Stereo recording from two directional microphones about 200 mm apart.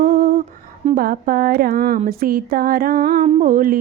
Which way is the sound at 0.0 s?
45° right (ahead or behind).